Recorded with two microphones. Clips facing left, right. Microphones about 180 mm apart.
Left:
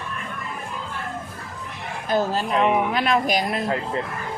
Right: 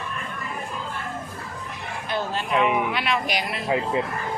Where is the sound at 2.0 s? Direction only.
40° left (ahead or behind).